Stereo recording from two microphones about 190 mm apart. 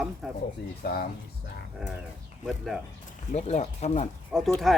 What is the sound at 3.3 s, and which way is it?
Speech, 35° left (ahead or behind).